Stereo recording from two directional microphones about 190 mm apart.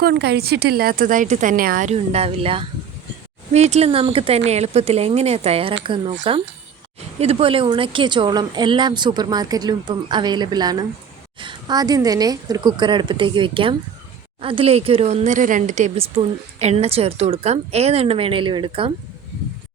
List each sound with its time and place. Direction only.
0.0 s speech: 60° right (ahead or behind); by 6.1 s 25° right (ahead or behind)
7.2 s speech: 30° right (ahead or behind)